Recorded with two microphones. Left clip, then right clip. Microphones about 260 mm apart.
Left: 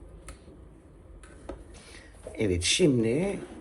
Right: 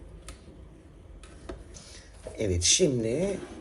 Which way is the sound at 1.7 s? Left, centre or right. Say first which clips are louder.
Even; left.